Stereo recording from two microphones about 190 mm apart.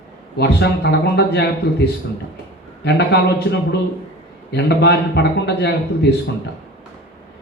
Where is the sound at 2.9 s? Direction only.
60° left (ahead or behind).